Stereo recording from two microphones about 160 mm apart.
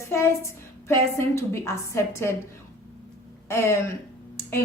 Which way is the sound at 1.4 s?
20° left (ahead or behind).